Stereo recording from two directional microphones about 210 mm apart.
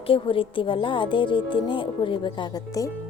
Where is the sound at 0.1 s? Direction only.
25° left (ahead or behind).